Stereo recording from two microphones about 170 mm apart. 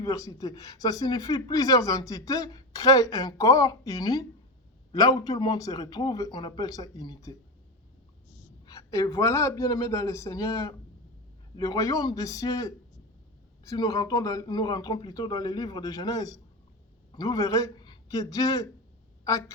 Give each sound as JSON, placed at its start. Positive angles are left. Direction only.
{"t": 0.0, "sound": "speech", "side_deg": 20}
{"t": 8.6, "sound": "speech", "side_deg": 20}